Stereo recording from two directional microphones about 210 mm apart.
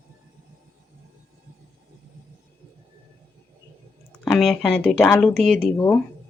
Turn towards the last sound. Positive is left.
turn(degrees=10)  # may be behind; listen again after turning